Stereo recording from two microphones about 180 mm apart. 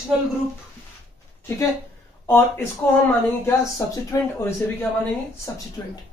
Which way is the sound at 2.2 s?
10° left (ahead or behind).